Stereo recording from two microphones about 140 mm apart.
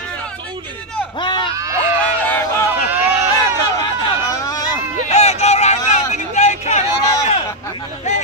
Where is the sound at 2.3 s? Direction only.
15° left (ahead or behind).